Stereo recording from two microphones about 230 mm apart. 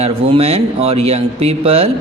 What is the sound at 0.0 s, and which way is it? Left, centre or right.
Speech, right.